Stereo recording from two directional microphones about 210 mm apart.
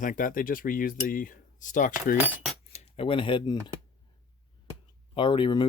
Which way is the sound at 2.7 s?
30° left (ahead or behind).